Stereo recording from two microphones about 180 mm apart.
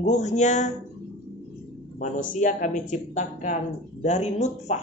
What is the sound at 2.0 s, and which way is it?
Speech, 45° left (ahead or behind).